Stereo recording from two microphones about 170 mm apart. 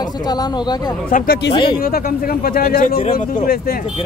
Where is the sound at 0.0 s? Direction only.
25° left (ahead or behind).